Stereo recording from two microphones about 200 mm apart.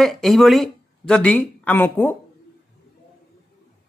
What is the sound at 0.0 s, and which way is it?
Speech, centre (ahead or behind).